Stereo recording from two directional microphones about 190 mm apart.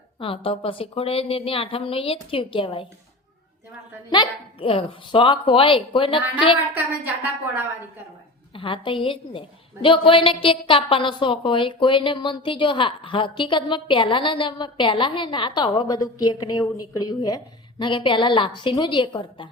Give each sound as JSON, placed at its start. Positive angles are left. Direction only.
{"t": 0.2, "sound": "a woman's voice", "side_deg": 30}
{"t": 4.1, "sound": "a woman's voice", "side_deg": 25}
{"t": 6.7, "sound": "a woman's voice", "side_deg": -10}
{"t": 8.5, "sound": "a woman's voice", "side_deg": 25}